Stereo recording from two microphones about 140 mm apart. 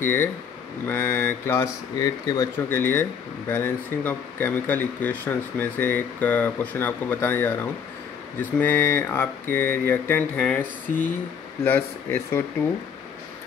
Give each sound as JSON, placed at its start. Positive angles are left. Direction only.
{"t": 0.0, "sound": "speech", "side_deg": 15}